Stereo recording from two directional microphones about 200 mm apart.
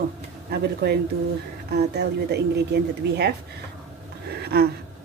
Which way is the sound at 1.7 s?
55° right (ahead or behind).